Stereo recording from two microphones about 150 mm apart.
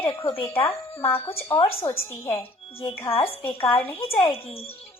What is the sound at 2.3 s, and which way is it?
Speech, 40° left (ahead or behind).